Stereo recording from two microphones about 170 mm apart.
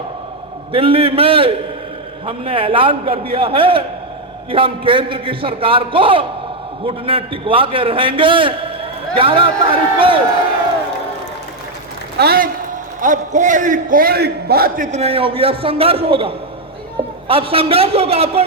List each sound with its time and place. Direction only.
0.7 s a man's voice: 35° right (ahead or behind)
12.1 s a man's voice: 65° right (ahead or behind)
13.0 s a man's voice: 50° right (ahead or behind); by 14.8 s 65° right (ahead or behind)
14.8 s a man's voice: 40° right (ahead or behind)